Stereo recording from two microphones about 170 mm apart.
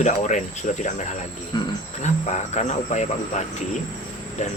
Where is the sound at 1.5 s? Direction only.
25° left (ahead or behind).